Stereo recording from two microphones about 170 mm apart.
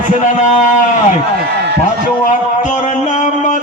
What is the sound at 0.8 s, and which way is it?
Run, 50° left (ahead or behind).